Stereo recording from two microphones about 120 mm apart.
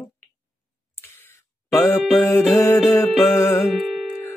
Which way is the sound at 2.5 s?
20° left (ahead or behind).